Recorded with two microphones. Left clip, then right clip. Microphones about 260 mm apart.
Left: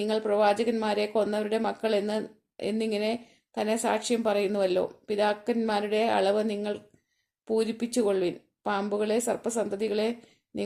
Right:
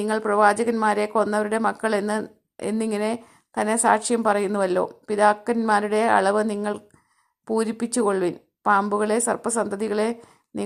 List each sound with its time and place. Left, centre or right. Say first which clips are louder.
0.0 s a woman's voice: right 5 dB; centre